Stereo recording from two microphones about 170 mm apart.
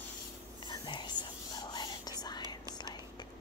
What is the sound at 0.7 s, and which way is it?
Whispering, 25° left (ahead or behind).